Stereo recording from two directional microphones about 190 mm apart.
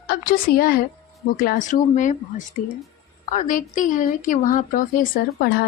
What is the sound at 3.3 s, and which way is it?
A woman's voice, 45° left (ahead or behind).